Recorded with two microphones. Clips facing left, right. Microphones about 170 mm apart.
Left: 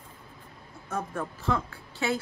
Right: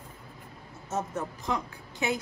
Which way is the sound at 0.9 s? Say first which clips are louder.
Right 1 dB; 20° right (ahead or behind).